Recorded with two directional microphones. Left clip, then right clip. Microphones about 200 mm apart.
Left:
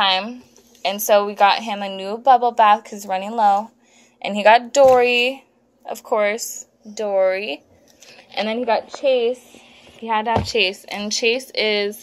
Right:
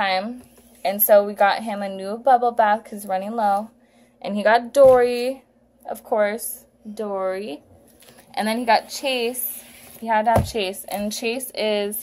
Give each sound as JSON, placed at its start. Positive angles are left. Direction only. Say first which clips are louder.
{"t": 0.0, "sound": "a sound", "louder": "left 4 dB", "side_deg": 0}
{"t": 0.8, "sound": "a woman's voice", "louder": "even", "side_deg": 0}
{"t": 8.9, "sound": "a woman's voice", "louder": "left 6 dB", "side_deg": -15}